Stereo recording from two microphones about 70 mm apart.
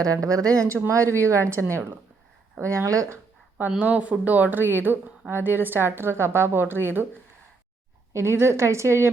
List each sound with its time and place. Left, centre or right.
0.0 s a woman's voice: right
3.8 s speech: centre
8.1 s speech: right